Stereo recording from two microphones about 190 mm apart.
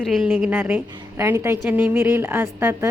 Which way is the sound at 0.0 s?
Centre (ahead or behind).